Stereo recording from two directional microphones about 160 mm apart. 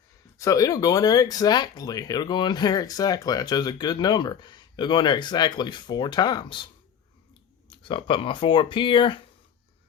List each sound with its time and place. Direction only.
0.3 s speech: 20° left (ahead or behind)
7.7 s speech: 30° left (ahead or behind)